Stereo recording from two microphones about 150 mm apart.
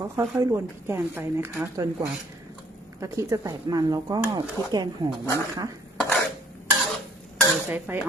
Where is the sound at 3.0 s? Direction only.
20° right (ahead or behind).